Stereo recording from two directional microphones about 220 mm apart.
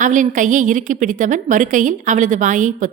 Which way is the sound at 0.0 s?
35° right (ahead or behind).